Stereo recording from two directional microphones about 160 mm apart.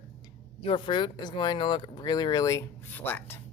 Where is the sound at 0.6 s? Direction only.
35° left (ahead or behind); by 3.3 s 15° left (ahead or behind).